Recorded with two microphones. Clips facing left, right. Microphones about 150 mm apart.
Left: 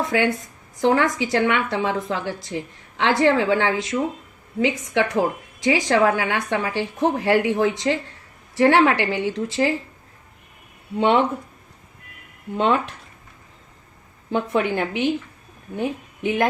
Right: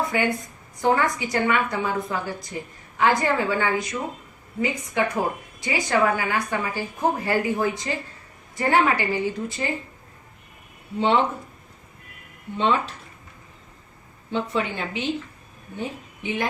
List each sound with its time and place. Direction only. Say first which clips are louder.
0.0 s a woman's voice: left 3 dB; 90° left
10.9 s a woman's voice: left 3 dB; 60° left (ahead or behind)
12.5 s speech: left 2 dB; 55° left (ahead or behind)
14.3 s a woman's voice: left 5 dB; 55° left (ahead or behind)